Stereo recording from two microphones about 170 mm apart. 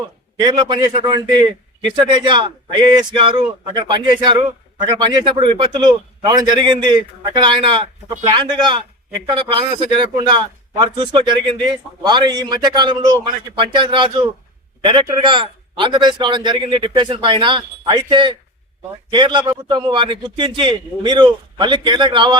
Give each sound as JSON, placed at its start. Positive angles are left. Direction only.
{"t": 0.3, "sound": "speech", "side_deg": -25}